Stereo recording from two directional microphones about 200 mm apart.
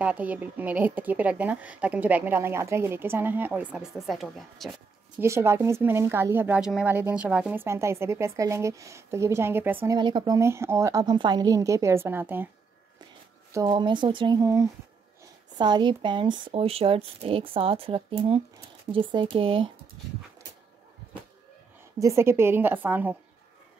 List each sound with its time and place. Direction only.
0.0 s a woman's voice: 5° right (ahead or behind)
5.2 s a woman's voice: 15° right (ahead or behind)
9.9 s a woman's voice: 20° right (ahead or behind)
13.5 s speech: 20° right (ahead or behind)
21.9 s a woman's voice: 15° right (ahead or behind)